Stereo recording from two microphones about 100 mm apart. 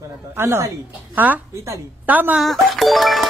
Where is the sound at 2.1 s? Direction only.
15° right (ahead or behind).